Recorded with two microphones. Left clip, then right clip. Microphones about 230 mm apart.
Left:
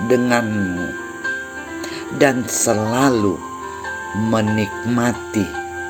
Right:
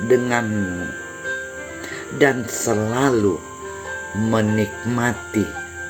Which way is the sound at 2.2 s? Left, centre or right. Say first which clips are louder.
Left 2 dB; left.